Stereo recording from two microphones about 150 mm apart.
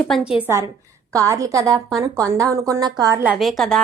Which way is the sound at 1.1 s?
20° right (ahead or behind).